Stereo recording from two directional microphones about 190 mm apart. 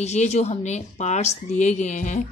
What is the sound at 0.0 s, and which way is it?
A woman's voice, 35° left (ahead or behind).